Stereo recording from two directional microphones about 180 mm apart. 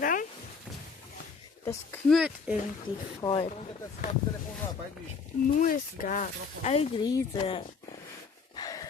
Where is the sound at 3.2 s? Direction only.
30° left (ahead or behind).